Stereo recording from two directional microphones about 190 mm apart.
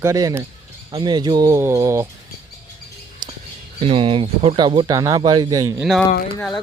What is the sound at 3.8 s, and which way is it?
Speech, 25° right (ahead or behind).